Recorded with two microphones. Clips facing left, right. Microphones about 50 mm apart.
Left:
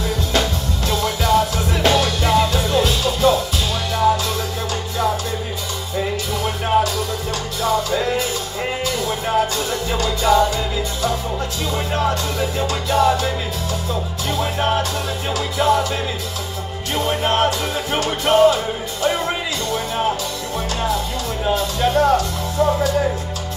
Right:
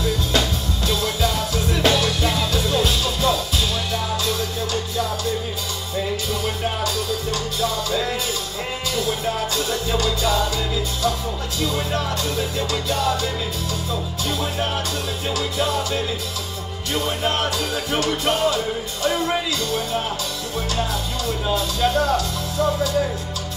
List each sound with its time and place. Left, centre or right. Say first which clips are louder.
0.0 s music: left 1 dB; left
7.6 s music: left 5 dB; left
11.6 s music: left 1 dB; left
12.1 s music: left 3 dB; left
12.9 s music: left 7 dB; left
14.3 s music: left 6 dB; left
21.5 s music: left 3 dB; left